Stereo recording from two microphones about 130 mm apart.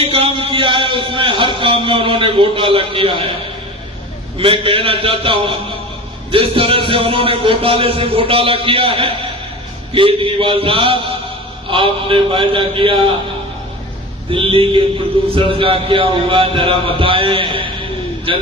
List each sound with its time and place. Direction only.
0.0 s music: 45° right (ahead or behind)
4.4 s a man's voice: 45° right (ahead or behind)
14.3 s a man's voice: 45° right (ahead or behind)